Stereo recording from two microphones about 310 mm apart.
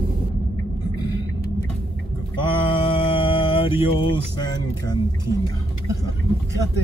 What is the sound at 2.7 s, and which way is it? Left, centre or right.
Mantra, centre.